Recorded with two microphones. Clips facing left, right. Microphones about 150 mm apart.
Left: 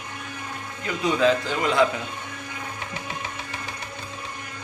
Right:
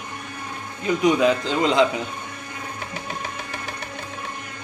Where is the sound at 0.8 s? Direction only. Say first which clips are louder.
Right 3 dB; 15° right (ahead or behind).